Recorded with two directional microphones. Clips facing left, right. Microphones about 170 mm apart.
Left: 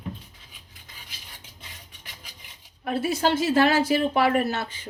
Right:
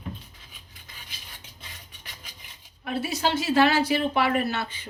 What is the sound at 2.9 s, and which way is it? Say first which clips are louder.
A woman's voice: left 3 dB; 50° left (ahead or behind).